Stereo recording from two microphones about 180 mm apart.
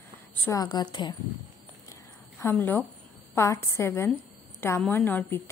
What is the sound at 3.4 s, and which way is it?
A woman's voice, 15° left (ahead or behind).